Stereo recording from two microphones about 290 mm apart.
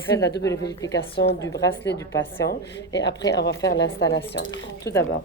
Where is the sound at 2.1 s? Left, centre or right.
Centre.